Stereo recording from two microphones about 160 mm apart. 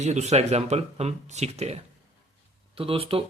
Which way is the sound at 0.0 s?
45° right (ahead or behind).